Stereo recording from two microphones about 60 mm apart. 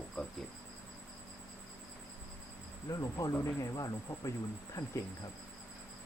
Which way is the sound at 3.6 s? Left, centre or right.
Left.